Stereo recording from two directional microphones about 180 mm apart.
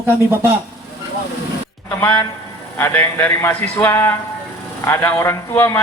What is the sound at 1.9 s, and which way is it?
A man's voice, 15° left (ahead or behind).